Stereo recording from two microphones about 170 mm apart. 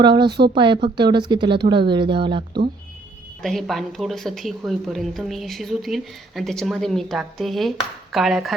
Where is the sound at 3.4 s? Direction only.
Centre (ahead or behind).